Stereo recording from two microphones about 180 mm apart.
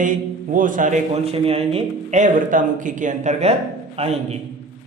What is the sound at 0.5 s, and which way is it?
A man's voice, 45° right (ahead or behind).